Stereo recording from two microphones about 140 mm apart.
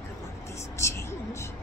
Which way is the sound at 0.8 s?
20° left (ahead or behind).